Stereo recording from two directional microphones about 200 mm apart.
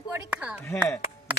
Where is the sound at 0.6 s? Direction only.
15° left (ahead or behind).